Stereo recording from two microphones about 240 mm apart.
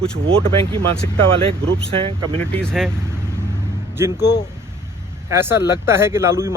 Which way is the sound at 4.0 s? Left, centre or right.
Centre.